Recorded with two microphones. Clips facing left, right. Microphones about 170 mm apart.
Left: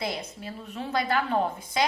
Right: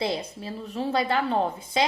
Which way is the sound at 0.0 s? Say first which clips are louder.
Right 4 dB; 30° right (ahead or behind).